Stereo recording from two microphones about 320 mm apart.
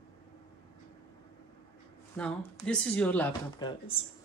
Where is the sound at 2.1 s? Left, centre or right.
Centre.